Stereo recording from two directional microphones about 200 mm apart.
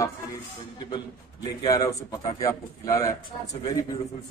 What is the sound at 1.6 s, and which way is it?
A man's voice, 20° left (ahead or behind).